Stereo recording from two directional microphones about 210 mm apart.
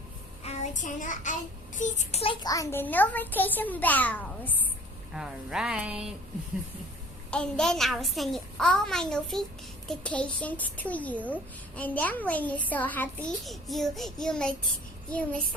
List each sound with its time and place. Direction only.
0.4 s child singing: 35° left (ahead or behind); by 4.5 s 10° left (ahead or behind)
5.1 s a child's voice: 5° right (ahead or behind)
7.3 s a child's voice: 5° left (ahead or behind)
9.9 s child singing: 5° left (ahead or behind)